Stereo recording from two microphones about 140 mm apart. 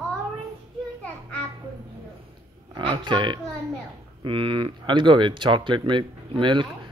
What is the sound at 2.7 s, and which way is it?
Speech, 35° right (ahead or behind).